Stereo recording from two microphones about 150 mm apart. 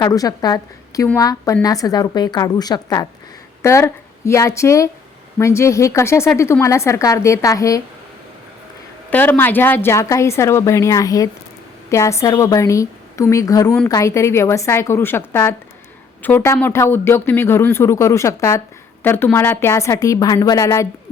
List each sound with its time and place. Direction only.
0.0 s speech: 25° left (ahead or behind)
9.0 s speech: 10° left (ahead or behind)